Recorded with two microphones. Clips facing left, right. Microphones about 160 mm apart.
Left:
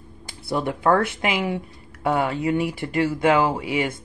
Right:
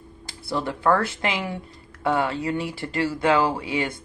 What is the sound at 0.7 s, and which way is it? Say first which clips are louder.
Speech: left 2 dB; 20° left (ahead or behind).